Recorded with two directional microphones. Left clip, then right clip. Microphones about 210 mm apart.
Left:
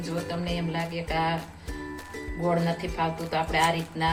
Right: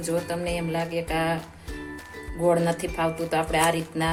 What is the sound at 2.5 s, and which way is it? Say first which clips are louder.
Speech: right 5 dB; 50° right (ahead or behind).